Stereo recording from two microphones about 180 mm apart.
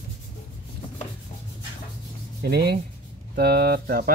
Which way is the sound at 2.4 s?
60° right (ahead or behind).